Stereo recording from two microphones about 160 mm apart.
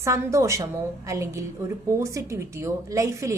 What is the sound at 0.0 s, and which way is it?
A woman's voice, 20° right (ahead or behind).